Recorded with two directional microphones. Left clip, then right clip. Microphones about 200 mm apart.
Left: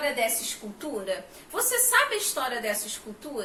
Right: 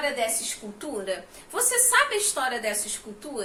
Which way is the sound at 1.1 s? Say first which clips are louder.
Even; 20° right (ahead or behind).